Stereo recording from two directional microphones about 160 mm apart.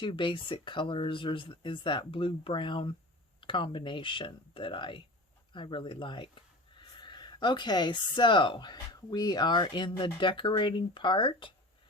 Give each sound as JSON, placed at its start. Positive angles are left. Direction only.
{"t": 0.0, "sound": "speech", "side_deg": 30}